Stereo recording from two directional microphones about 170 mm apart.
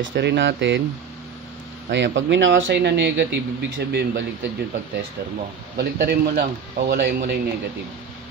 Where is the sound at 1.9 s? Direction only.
90° right.